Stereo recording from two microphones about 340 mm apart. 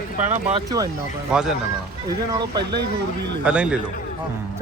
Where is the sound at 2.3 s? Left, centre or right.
Centre.